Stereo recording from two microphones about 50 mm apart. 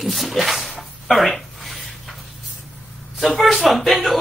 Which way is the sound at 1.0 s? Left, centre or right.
Centre.